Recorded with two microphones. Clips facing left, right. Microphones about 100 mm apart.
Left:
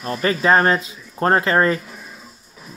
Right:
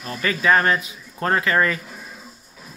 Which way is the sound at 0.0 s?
35° left (ahead or behind).